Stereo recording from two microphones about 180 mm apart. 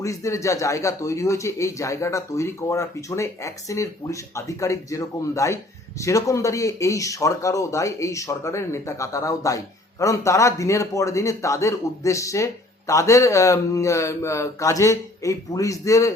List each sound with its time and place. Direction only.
0.0 s speech: 15° left (ahead or behind)